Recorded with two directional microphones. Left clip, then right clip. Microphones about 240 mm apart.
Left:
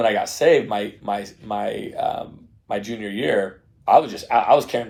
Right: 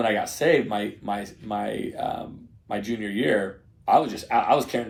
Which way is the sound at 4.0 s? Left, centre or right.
Left.